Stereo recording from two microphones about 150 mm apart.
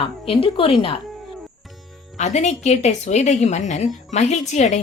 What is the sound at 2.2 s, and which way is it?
Speech, 50° left (ahead or behind).